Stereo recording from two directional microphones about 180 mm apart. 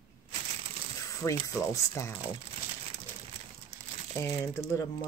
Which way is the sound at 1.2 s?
15° left (ahead or behind).